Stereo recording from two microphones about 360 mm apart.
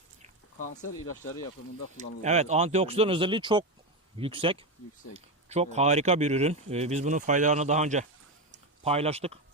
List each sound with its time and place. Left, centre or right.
2.2 s speech: centre